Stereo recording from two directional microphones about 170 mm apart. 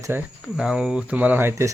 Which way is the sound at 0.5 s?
5° right (ahead or behind).